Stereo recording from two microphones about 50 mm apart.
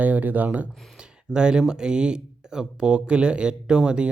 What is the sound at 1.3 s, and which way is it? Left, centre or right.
Speech, centre.